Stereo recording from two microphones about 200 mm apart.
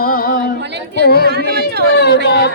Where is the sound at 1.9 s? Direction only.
55° left (ahead or behind).